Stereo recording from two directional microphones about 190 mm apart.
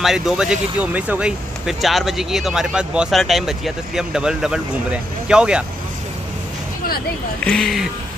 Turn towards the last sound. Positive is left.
turn(degrees=0)  # may be behind; listen again after turning